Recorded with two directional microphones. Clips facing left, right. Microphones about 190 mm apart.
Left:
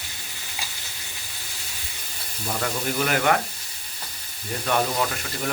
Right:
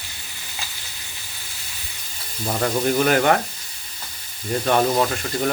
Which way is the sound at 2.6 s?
40° right (ahead or behind).